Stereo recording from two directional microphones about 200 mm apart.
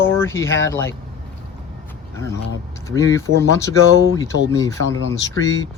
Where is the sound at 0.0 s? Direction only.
10° left (ahead or behind).